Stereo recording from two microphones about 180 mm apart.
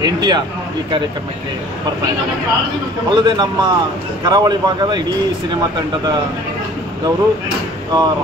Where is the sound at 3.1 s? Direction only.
25° right (ahead or behind).